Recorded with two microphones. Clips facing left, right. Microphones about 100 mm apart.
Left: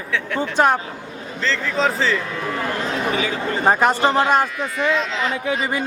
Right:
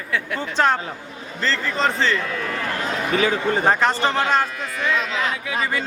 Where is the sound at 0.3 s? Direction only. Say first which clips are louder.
Left 3 dB; 15° left (ahead or behind).